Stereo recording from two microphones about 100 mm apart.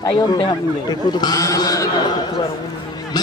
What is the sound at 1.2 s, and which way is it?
Speech, 40° left (ahead or behind).